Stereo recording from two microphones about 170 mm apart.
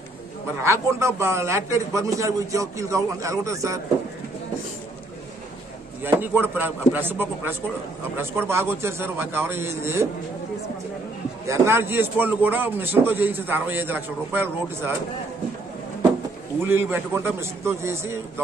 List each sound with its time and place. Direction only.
0.6 s a man's voice: 15° right (ahead or behind)
6.0 s a man's voice: 10° right (ahead or behind)
11.4 s a man's voice: 15° right (ahead or behind)
16.6 s a man's voice: 15° right (ahead or behind)